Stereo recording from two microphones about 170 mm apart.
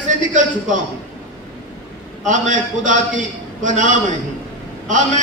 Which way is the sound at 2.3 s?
50° right (ahead or behind).